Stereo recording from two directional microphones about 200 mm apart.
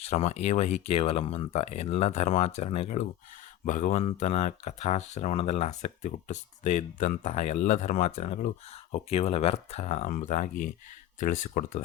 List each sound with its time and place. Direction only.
0.0 s speech: 30° left (ahead or behind)